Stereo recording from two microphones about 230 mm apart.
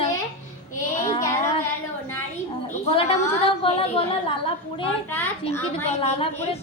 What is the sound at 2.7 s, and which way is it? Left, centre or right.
Speech, left.